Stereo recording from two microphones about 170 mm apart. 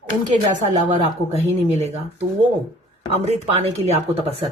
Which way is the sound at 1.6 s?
40° right (ahead or behind).